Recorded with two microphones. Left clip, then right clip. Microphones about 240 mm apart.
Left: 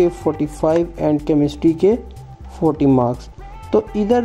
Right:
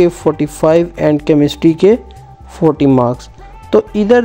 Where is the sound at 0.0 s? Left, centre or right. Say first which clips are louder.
Right 5 dB; right.